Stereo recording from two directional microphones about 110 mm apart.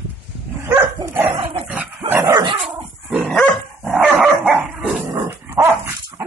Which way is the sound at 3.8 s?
10° right (ahead or behind).